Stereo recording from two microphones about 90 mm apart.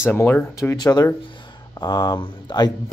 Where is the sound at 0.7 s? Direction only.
45° left (ahead or behind).